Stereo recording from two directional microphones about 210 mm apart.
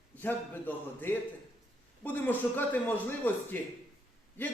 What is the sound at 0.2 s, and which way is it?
A man's voice, 10° left (ahead or behind).